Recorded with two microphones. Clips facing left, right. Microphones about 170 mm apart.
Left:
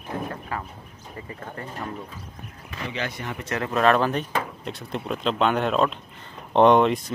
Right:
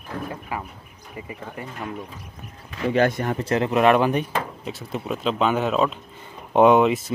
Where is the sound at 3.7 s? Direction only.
15° right (ahead or behind).